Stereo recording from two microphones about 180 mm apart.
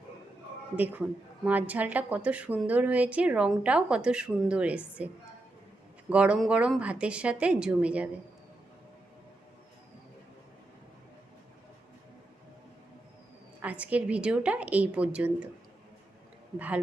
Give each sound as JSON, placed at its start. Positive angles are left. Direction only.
{"t": 1.5, "sound": "a woman's voice", "side_deg": -10}
{"t": 6.1, "sound": "a woman's voice", "side_deg": -5}
{"t": 13.6, "sound": "a woman's voice", "side_deg": -10}
{"t": 16.6, "sound": "a woman's voice", "side_deg": -10}